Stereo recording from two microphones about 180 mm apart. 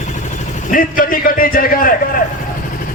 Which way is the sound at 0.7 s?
50° left (ahead or behind).